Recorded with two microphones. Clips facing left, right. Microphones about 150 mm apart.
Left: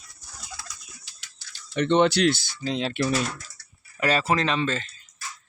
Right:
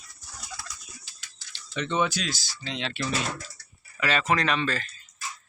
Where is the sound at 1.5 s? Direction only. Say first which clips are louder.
Left 7 dB; 55° left (ahead or behind).